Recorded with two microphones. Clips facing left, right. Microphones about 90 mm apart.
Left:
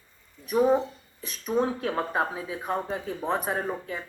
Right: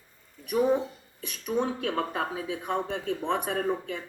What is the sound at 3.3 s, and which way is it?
Speech, 35° left (ahead or behind).